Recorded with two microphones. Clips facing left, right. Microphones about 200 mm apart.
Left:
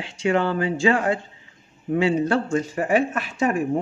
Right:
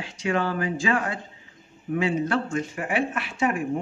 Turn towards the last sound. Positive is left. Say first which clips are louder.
# left 3 dB
turn(degrees=40)  # may be behind; listen again after turning